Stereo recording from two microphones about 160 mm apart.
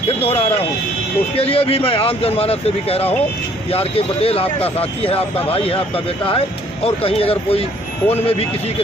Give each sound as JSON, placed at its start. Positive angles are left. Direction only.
{"t": 0.2, "sound": "speech", "side_deg": 40}
{"t": 6.8, "sound": "speech", "side_deg": 35}